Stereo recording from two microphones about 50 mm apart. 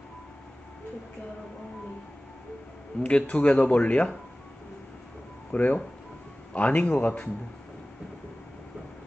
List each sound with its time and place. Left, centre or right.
3.0 s speech: left
5.5 s a man's voice: left